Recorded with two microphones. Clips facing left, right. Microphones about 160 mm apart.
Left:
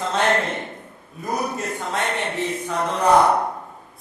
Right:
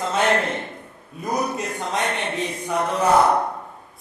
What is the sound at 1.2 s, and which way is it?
Speech, 20° right (ahead or behind).